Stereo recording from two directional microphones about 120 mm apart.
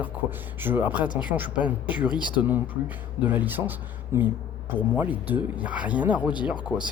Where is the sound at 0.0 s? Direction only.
15° right (ahead or behind).